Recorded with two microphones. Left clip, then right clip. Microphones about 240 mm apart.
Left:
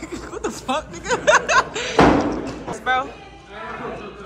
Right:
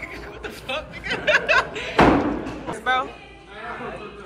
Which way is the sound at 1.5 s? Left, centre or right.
Centre.